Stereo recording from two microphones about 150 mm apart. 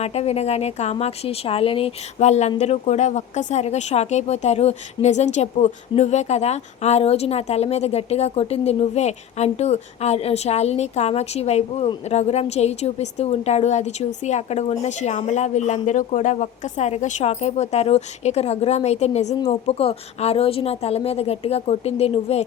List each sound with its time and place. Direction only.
0.0 s speech: 45° left (ahead or behind)